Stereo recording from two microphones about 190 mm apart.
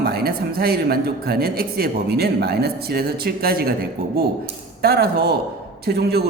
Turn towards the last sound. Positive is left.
turn(degrees=-55)  # may be behind; listen again after turning